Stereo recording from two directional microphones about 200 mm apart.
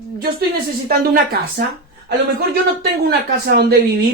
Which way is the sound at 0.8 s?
50° right (ahead or behind).